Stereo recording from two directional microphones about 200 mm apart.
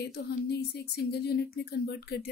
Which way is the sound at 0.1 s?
50° left (ahead or behind).